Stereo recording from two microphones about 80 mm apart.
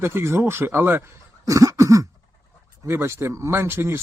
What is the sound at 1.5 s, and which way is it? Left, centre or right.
Cough, right.